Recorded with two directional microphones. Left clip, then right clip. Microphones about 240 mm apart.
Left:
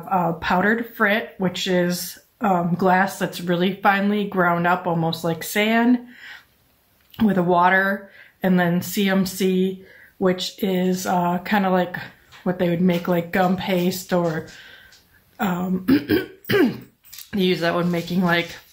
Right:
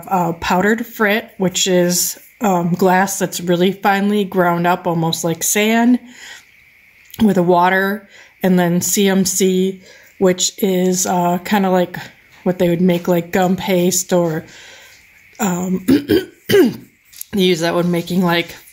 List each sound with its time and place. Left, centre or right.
0.1 s speech: right